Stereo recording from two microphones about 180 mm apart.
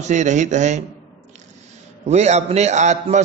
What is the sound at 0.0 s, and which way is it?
Speech, 40° right (ahead or behind).